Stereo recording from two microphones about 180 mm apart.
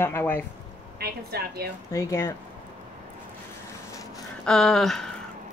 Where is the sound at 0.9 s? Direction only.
60° right (ahead or behind).